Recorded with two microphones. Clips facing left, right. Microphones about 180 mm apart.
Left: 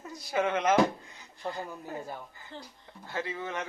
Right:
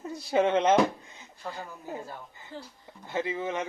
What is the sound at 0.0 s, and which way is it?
Speech, 30° right (ahead or behind).